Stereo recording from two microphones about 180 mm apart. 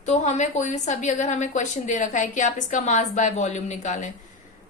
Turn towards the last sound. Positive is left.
turn(degrees=40)  # may be behind; listen again after turning